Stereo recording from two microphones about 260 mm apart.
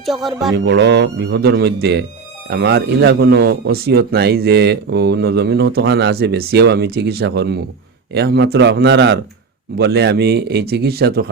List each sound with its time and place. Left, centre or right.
0.0 s speech: centre
0.5 s speech: right